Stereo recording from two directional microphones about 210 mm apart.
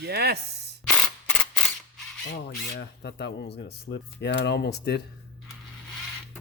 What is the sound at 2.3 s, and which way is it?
Speech, 55° left (ahead or behind).